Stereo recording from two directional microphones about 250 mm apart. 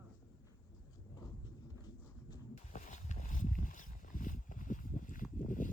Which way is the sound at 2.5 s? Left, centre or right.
Left.